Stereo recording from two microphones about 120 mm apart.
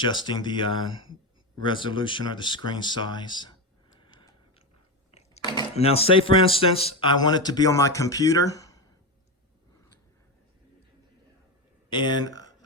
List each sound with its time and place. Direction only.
0.0 s speech: 40° left (ahead or behind)
5.4 s a sound: 40° left (ahead or behind)
5.7 s speech: 55° left (ahead or behind); by 8.8 s 30° left (ahead or behind)
11.9 s speech: 40° left (ahead or behind)